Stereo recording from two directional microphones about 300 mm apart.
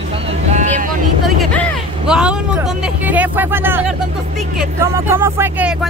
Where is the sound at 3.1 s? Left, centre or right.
Centre.